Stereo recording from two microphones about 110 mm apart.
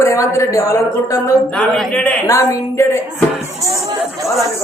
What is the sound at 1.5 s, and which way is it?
Speech, 5° left (ahead or behind).